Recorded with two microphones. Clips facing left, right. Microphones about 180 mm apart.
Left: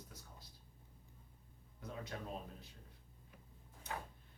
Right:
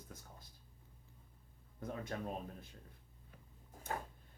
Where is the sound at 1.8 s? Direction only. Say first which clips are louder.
Right 4 dB; 50° right (ahead or behind).